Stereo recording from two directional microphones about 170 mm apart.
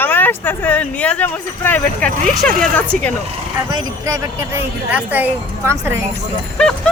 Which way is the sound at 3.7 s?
20° right (ahead or behind).